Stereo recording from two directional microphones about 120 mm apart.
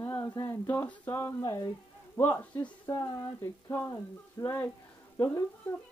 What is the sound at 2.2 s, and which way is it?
Speech, 20° left (ahead or behind).